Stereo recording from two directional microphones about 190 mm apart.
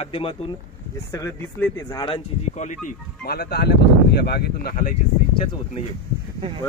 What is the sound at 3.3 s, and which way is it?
Speech, 55° left (ahead or behind).